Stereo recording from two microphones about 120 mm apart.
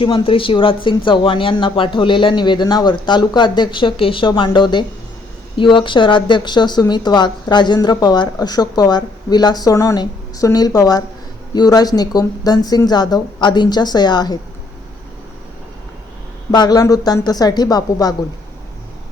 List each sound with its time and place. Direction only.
0.0 s speech: 45° left (ahead or behind)
16.5 s speech: 35° left (ahead or behind)